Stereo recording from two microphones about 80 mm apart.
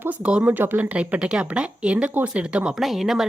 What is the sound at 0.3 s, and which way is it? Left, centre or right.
Speech, centre.